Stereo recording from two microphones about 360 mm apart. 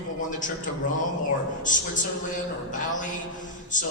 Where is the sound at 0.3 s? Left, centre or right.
Left.